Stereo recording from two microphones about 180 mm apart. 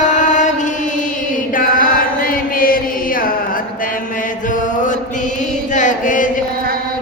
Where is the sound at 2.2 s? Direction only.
50° left (ahead or behind).